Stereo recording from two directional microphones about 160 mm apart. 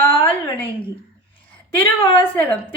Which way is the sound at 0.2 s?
10° left (ahead or behind).